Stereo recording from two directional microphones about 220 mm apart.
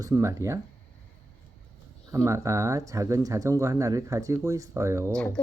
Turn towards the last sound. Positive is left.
turn(degrees=5)  # may be behind; listen again after turning